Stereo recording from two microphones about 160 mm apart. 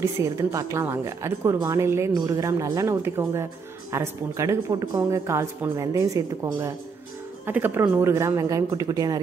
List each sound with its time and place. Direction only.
0.0 s a woman's voice: 20° right (ahead or behind)